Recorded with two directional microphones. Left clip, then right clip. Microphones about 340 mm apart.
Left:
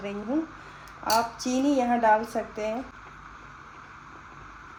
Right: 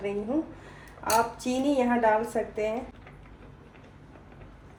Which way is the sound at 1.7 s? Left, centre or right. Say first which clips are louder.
Left 2 dB; left.